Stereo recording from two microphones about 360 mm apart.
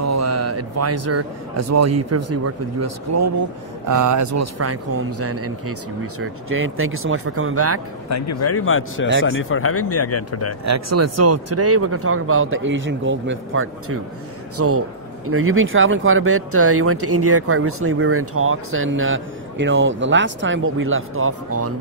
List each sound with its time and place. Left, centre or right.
0.0 s a man's voice: right
8.1 s speech: left
10.6 s speech: right